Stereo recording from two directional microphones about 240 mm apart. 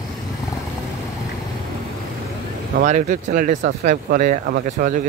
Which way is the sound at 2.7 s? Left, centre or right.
Right.